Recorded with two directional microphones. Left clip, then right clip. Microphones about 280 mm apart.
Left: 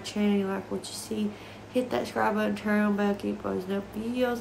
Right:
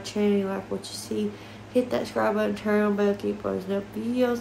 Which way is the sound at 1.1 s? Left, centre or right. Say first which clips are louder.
Right 4 dB; centre.